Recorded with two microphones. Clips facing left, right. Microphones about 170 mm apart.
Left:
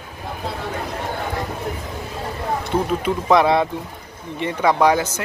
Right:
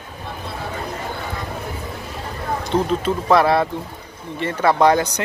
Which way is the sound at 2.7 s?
10° left (ahead or behind).